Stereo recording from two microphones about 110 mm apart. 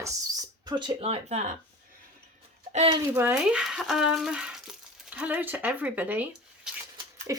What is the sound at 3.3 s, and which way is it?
Speech, 5° right (ahead or behind).